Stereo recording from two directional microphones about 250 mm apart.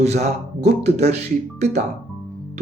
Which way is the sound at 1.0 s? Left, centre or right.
Right.